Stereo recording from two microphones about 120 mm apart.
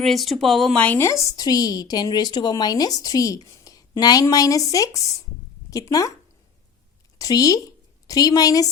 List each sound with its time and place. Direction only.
0.0 s speech: centre (ahead or behind)
1.0 s a woman's voice: 25° left (ahead or behind)
7.2 s a woman's voice: 30° left (ahead or behind)